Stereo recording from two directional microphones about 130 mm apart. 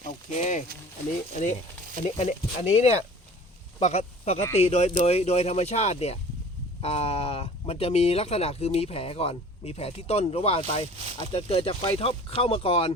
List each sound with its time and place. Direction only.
0.3 s speech: 75° left (ahead or behind)
2.0 s speech: 60° left (ahead or behind)